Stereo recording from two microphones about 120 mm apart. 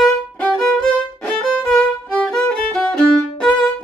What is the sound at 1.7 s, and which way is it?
Violin, 5° left (ahead or behind).